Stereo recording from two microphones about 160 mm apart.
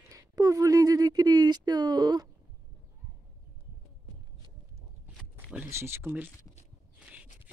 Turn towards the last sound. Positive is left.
turn(degrees=-15)  # may be behind; listen again after turning